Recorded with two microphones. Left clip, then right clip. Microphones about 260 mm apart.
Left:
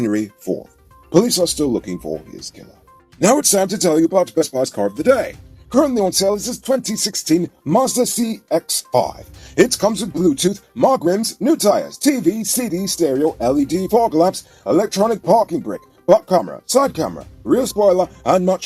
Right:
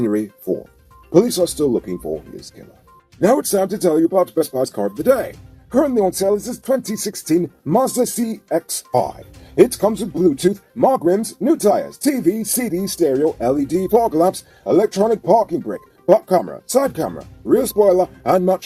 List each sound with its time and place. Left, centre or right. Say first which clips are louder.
0.0 s speech: even; left
3.3 s speech: left 1 dB; left